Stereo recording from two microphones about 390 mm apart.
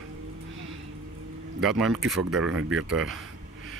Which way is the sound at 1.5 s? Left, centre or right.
Centre.